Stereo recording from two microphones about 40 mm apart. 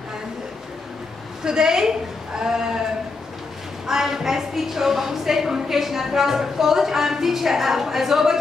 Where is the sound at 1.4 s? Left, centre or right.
Centre.